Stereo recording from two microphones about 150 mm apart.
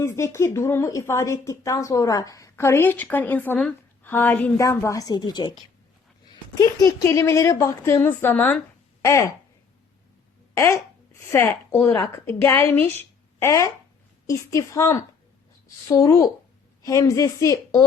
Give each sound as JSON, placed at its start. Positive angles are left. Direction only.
{"t": 0.0, "sound": "a woman's voice", "side_deg": 20}
{"t": 6.6, "sound": "a woman's voice", "side_deg": 25}
{"t": 10.5, "sound": "a woman's voice", "side_deg": 20}